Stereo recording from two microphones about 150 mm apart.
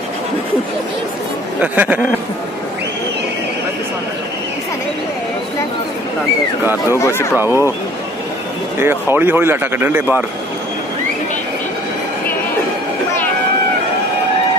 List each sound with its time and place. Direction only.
1.6 s speech: 10° right (ahead or behind)
6.6 s speech: 15° right (ahead or behind)
7.0 s speech: 15° left (ahead or behind)
7.3 s speech: 15° right (ahead or behind)
8.7 s speech: 15° right (ahead or behind)